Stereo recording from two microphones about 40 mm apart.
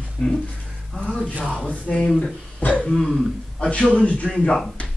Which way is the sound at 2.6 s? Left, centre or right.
Left.